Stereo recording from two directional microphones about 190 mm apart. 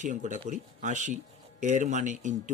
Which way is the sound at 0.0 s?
40° right (ahead or behind).